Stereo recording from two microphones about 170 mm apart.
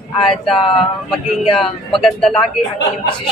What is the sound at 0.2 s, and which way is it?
Speech, centre (ahead or behind).